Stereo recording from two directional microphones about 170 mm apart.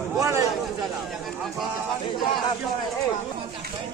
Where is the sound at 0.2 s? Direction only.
20° right (ahead or behind).